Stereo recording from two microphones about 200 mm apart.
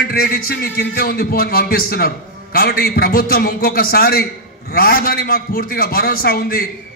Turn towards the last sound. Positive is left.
turn(degrees=50)  # may be behind; listen again after turning